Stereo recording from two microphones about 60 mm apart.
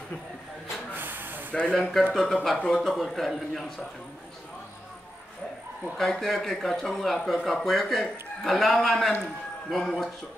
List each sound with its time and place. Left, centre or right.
0.9 s hiss: right
1.5 s speech: centre
1.8 s speech: centre
5.9 s speech: centre